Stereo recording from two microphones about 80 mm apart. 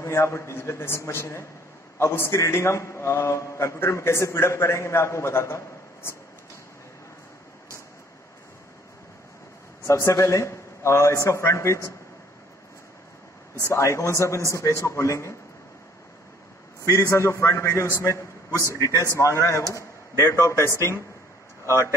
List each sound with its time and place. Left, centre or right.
0.0 s a man's voice: left
9.8 s a man's voice: left
13.6 s a man's voice: left
16.8 s a man's voice: left
18.7 s a man's voice: left